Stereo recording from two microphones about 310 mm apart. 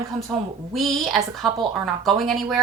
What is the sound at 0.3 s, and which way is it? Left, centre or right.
A woman's voice, centre.